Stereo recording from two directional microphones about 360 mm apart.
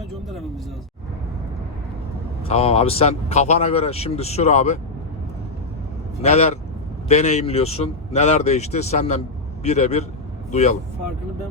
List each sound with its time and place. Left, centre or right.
2.5 s speech: centre
6.2 s speech: centre